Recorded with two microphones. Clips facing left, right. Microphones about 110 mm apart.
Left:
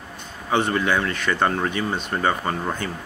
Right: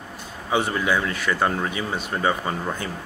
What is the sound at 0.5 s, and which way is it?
Speech, 5° right (ahead or behind).